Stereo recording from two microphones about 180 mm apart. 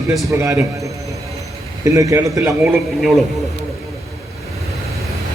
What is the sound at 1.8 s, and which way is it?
Speech, 15° right (ahead or behind).